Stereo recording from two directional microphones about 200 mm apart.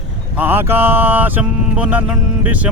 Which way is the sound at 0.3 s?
10° right (ahead or behind).